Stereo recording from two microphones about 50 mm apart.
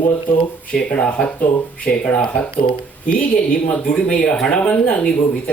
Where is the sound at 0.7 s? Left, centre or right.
Left.